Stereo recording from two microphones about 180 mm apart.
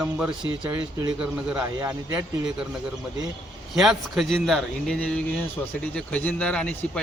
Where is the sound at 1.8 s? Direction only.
15° right (ahead or behind).